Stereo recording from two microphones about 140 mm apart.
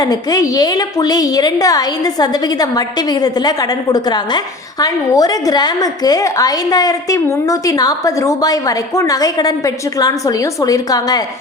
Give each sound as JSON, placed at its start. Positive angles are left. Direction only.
{"t": 0.0, "sound": "a woman's voice", "side_deg": 25}